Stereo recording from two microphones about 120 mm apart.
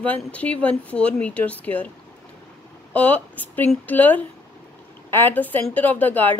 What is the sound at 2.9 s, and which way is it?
A woman's voice, 15° left (ahead or behind).